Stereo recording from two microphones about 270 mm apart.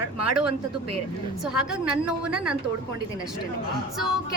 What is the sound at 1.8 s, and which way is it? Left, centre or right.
Speech, right.